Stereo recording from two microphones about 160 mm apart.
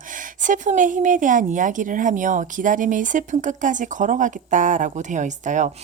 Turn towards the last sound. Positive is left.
turn(degrees=-50)  # may be behind; listen again after turning